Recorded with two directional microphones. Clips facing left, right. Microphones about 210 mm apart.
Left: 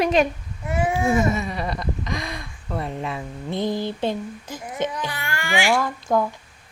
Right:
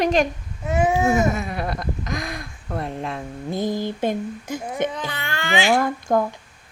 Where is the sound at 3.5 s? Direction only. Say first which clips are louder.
Even; 45° right (ahead or behind).